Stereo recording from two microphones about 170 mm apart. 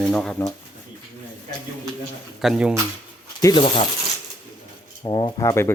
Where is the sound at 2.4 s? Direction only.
5° right (ahead or behind).